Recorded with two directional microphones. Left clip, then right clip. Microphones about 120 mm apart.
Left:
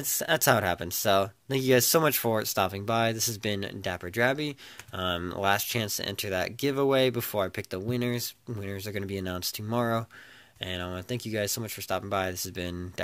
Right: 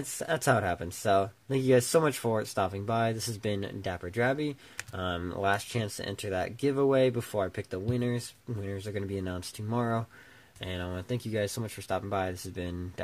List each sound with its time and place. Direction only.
0.2 s speech: 25° left (ahead or behind)
10.6 s speech: 10° left (ahead or behind)